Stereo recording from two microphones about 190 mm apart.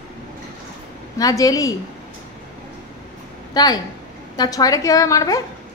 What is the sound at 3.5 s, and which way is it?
A woman's voice, 20° left (ahead or behind).